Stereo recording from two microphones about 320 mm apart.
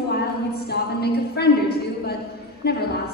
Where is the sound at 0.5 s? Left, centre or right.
Left.